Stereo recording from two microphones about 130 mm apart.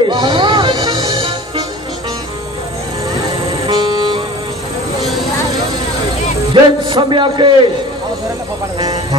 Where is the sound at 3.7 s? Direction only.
35° right (ahead or behind).